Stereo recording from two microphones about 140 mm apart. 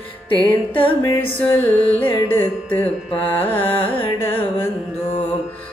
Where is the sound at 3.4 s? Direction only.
40° left (ahead or behind).